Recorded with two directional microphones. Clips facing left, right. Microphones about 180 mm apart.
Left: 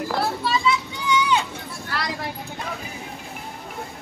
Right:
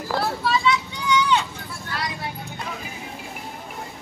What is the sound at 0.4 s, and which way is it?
Vehicle, centre (ahead or behind).